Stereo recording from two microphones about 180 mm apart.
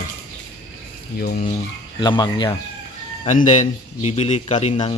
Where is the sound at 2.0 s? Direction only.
25° left (ahead or behind).